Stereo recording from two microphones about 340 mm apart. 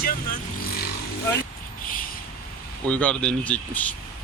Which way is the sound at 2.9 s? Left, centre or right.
Centre.